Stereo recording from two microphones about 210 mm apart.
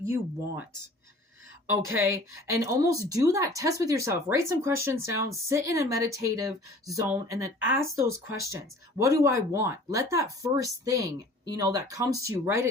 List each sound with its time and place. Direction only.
0.0 s speech: 10° right (ahead or behind)
1.7 s speech: 10° right (ahead or behind)